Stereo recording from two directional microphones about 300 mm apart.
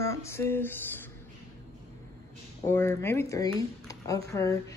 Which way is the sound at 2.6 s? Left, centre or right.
Centre.